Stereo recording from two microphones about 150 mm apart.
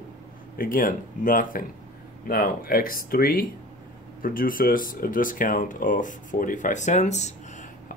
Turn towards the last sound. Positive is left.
turn(degrees=50)  # may be behind; listen again after turning